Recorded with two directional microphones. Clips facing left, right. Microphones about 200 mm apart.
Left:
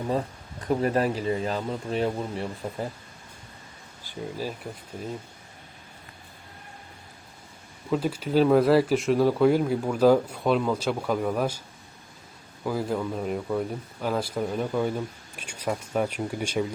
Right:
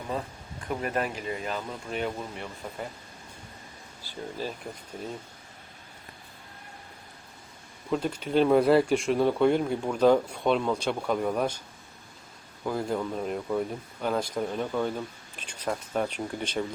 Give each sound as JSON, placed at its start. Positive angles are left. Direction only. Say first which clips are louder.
{"t": 0.7, "sound": "speech", "louder": "left 6 dB", "side_deg": 35}
{"t": 4.0, "sound": "speech", "louder": "left 2 dB", "side_deg": 10}
{"t": 7.9, "sound": "speech", "louder": "left 2 dB", "side_deg": 5}
{"t": 12.6, "sound": "speech", "louder": "left 2 dB", "side_deg": 5}